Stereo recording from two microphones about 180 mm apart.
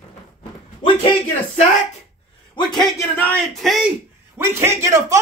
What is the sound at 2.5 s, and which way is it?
Speech, 25° left (ahead or behind).